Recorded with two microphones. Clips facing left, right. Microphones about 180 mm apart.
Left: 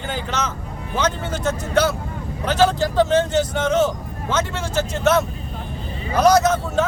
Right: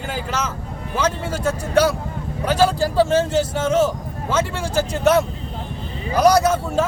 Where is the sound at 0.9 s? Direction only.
10° right (ahead or behind).